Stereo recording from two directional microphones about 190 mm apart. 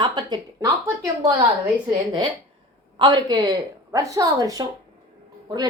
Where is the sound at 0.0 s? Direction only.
20° right (ahead or behind).